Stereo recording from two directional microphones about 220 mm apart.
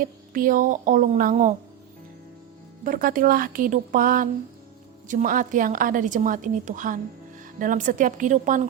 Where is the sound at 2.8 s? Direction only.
40° right (ahead or behind).